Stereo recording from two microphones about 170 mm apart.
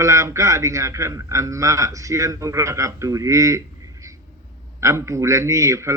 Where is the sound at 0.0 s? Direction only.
15° right (ahead or behind).